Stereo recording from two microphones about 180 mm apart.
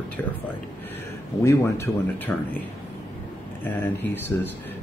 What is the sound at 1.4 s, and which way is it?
Speech, 15° left (ahead or behind).